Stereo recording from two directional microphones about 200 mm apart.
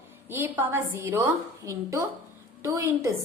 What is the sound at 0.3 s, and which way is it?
A woman's voice, 10° right (ahead or behind).